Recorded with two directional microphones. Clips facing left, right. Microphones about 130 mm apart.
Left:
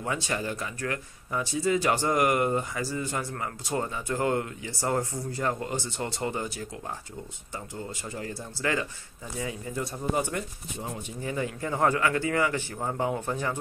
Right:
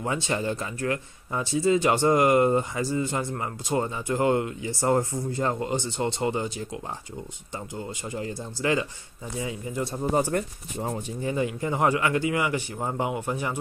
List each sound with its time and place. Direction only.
0.0 s speech: 25° right (ahead or behind)
10.1 s speech: 40° right (ahead or behind)
11.2 s a man's voice: 20° right (ahead or behind)